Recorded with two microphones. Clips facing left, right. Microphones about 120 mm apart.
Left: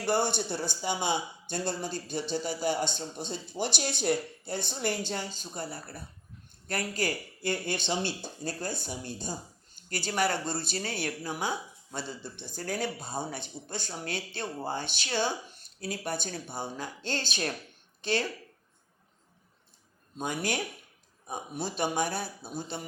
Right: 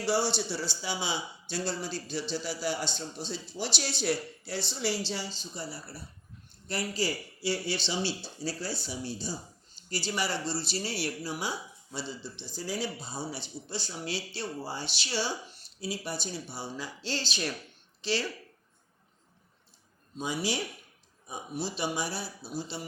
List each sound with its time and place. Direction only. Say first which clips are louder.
0.0 s a woman's voice: left 1 dB; 50° left (ahead or behind)
20.1 s speech: even; 55° left (ahead or behind)